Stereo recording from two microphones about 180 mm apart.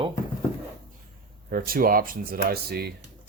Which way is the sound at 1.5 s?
50° right (ahead or behind).